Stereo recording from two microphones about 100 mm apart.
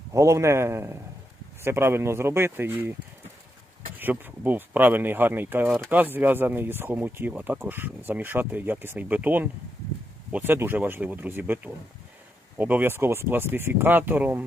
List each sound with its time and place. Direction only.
0.1 s speech: 30° right (ahead or behind)
3.9 s speech: 20° right (ahead or behind)